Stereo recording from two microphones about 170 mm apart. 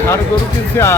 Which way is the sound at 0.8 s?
15° left (ahead or behind).